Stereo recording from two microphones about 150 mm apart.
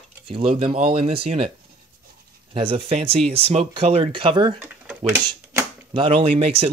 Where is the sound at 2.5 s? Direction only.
35° right (ahead or behind).